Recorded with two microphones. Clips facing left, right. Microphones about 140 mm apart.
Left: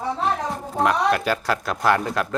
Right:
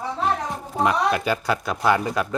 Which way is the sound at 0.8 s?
Centre (ahead or behind).